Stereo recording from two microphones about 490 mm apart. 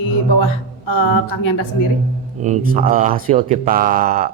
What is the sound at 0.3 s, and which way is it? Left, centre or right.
A woman's voice, left.